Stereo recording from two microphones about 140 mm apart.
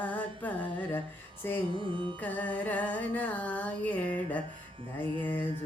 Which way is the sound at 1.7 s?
35° right (ahead or behind).